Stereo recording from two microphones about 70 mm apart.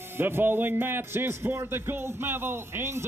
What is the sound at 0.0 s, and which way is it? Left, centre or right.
A man's voice, right.